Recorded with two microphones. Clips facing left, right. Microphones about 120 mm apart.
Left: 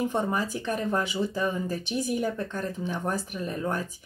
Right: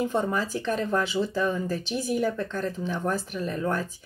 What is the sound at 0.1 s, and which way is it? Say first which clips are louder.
Speech: right 1 dB; 15° left (ahead or behind).